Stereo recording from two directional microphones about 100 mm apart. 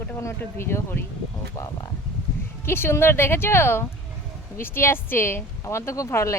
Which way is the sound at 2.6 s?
25° left (ahead or behind).